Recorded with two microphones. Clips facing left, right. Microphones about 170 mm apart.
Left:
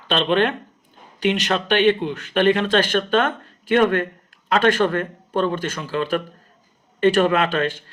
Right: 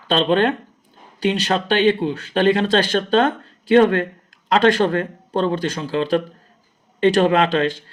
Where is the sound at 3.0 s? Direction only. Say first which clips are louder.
Right 3 dB; 35° right (ahead or behind).